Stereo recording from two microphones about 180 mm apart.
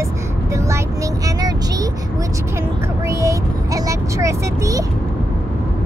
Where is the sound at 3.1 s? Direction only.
15° right (ahead or behind).